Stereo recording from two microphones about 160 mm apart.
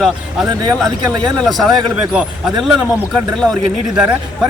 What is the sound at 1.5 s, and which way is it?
Speech, centre (ahead or behind).